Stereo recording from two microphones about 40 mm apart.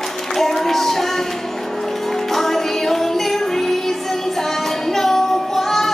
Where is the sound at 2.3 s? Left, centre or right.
Centre.